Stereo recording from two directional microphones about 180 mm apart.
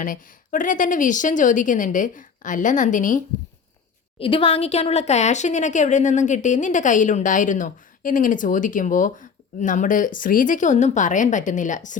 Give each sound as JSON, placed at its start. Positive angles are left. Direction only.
{"t": 0.0, "sound": "a woman's voice", "side_deg": 45}
{"t": 4.2, "sound": "a woman's voice", "side_deg": 30}